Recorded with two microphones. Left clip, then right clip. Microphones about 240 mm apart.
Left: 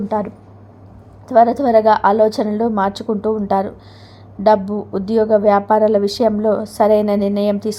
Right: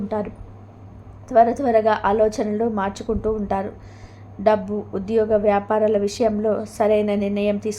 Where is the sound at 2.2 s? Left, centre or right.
Left.